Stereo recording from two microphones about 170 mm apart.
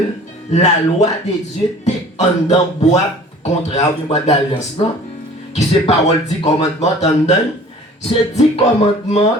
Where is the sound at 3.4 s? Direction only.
40° left (ahead or behind).